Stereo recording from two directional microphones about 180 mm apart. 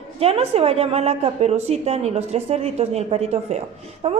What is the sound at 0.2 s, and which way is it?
A woman's voice, 35° right (ahead or behind).